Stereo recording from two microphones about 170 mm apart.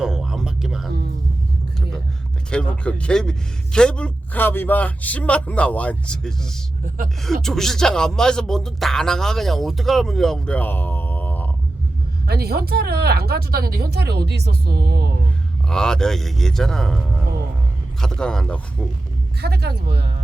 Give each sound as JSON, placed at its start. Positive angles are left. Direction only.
{"t": 0.0, "sound": "music", "side_deg": 0}
{"t": 2.5, "sound": "a man's voice", "side_deg": 5}
{"t": 6.8, "sound": "speech", "side_deg": -55}
{"t": 7.4, "sound": "speech", "side_deg": 0}
{"t": 12.2, "sound": "speech", "side_deg": -70}
{"t": 15.7, "sound": "speech", "side_deg": 5}
{"t": 18.0, "sound": "speech", "side_deg": 5}
{"t": 19.4, "sound": "speech", "side_deg": -70}